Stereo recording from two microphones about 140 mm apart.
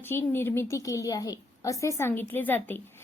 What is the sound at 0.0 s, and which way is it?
A woman's voice, 15° left (ahead or behind).